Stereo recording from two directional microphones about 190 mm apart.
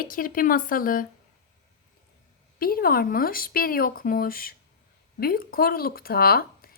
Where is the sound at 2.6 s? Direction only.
50° left (ahead or behind).